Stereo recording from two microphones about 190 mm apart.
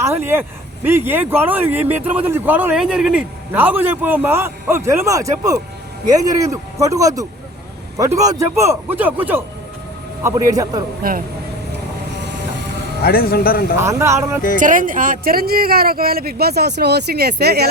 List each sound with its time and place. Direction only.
0.0 s a man's voice: 10° right (ahead or behind)
12.1 s vehicle: 65° right (ahead or behind)
13.0 s speech: 50° left (ahead or behind)
13.7 s speech: 15° right (ahead or behind)
14.6 s speech: 45° right (ahead or behind)